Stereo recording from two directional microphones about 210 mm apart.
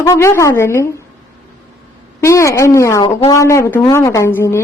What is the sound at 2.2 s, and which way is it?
A woman's voice, 15° left (ahead or behind).